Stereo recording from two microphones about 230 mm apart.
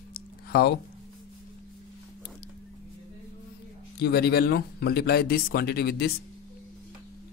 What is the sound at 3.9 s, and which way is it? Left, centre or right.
Speech, left.